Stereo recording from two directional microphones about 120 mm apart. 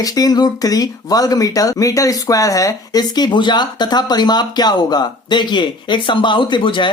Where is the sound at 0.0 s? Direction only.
30° left (ahead or behind).